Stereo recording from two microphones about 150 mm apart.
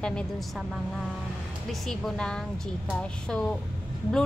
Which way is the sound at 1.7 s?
5° left (ahead or behind).